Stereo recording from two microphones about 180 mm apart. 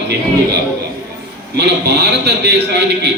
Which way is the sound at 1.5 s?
65° right (ahead or behind).